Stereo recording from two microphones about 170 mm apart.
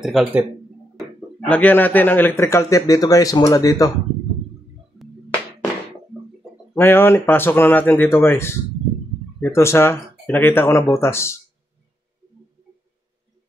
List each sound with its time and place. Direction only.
0.0 s speech: centre (ahead or behind)
0.9 s speech: 5° left (ahead or behind); by 3.9 s 20° left (ahead or behind)
6.7 s speech: 10° left (ahead or behind)